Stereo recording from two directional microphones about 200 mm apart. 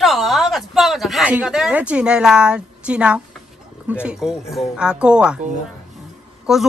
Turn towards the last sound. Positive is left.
turn(degrees=0)  # may be behind; listen again after turning